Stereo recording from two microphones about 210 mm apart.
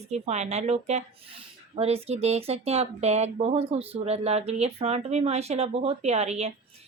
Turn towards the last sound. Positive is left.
turn(degrees=-30)  # may be behind; listen again after turning